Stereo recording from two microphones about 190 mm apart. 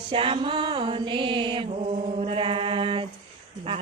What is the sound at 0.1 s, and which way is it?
Music, 30° right (ahead or behind).